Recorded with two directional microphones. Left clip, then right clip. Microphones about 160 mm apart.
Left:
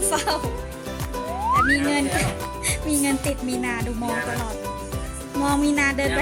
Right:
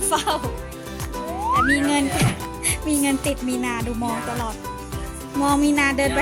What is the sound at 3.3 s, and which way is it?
Speech, 15° right (ahead or behind).